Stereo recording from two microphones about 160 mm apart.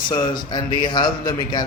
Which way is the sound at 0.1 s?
30° left (ahead or behind).